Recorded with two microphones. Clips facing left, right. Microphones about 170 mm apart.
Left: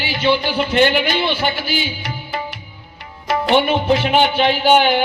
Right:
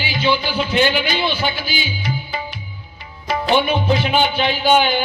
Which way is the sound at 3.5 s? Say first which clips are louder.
Left 2 dB; 65° left (ahead or behind).